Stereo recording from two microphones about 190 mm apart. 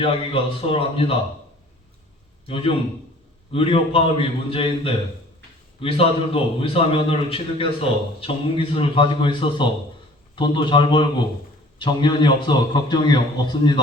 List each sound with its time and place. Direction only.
0.0 s a man's voice: 30° left (ahead or behind)
3.5 s a man's voice: 30° left (ahead or behind)